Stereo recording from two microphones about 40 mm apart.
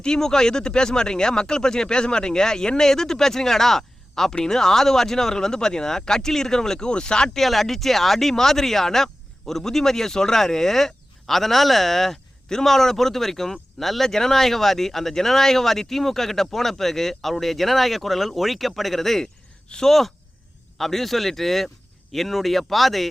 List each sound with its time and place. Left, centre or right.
0.0 s speech: centre
7.3 s speech: centre
19.2 s a sound: centre
19.9 s speech: centre